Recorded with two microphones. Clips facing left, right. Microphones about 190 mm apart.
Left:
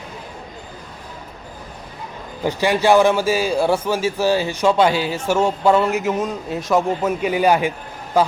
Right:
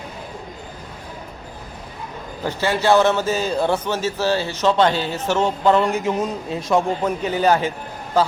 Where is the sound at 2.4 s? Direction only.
15° left (ahead or behind).